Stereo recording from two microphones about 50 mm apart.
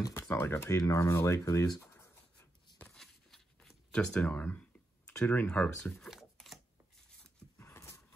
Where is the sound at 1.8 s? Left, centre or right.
Left.